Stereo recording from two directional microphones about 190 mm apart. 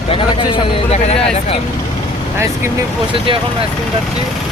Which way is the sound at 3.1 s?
25° right (ahead or behind).